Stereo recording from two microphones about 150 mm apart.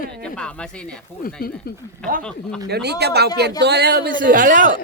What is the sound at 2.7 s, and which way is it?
A man's voice, 90° right.